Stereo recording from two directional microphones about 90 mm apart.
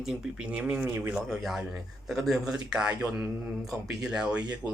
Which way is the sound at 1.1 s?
5° right (ahead or behind).